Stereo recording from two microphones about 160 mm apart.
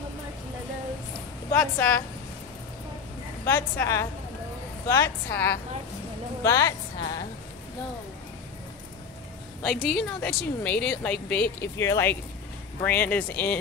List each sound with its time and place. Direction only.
1.5 s speech: 10° left (ahead or behind)
3.4 s a woman's voice: 15° left (ahead or behind)
9.6 s speech: centre (ahead or behind)